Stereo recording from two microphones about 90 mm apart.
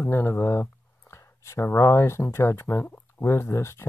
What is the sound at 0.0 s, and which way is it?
Speech, 30° left (ahead or behind).